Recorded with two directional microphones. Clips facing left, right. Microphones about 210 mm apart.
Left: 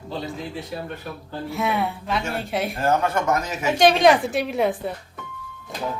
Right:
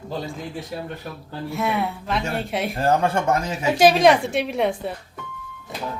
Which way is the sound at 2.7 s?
30° right (ahead or behind).